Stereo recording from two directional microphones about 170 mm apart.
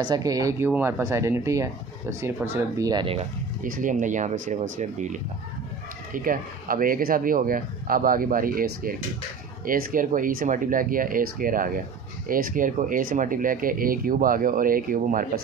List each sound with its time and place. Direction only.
0.0 s speech: 20° right (ahead or behind)
3.6 s speech: 55° right (ahead or behind)
6.1 s speech: 55° right (ahead or behind)